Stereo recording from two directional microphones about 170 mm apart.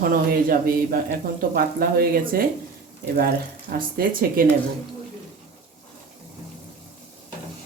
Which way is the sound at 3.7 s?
65° right (ahead or behind).